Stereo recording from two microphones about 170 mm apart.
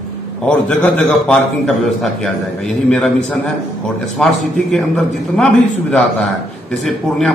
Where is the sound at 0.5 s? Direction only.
5° left (ahead or behind).